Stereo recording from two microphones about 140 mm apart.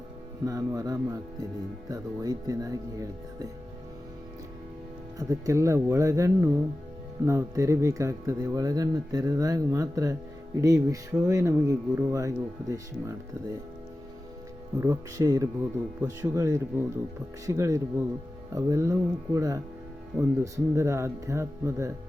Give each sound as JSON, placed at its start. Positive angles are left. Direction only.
{"t": 0.4, "sound": "speech", "side_deg": -25}
{"t": 5.3, "sound": "speech", "side_deg": -20}
{"t": 14.8, "sound": "speech", "side_deg": -20}